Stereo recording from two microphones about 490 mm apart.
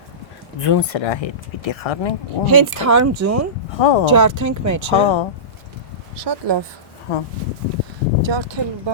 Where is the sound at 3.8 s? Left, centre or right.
Left.